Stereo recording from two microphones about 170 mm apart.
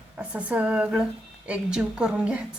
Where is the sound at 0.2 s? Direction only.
10° right (ahead or behind).